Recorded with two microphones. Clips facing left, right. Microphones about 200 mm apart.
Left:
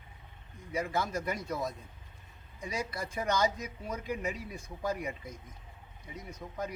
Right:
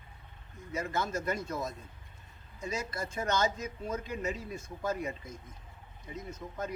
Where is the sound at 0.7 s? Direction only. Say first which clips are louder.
Left 1 dB; 15° left (ahead or behind).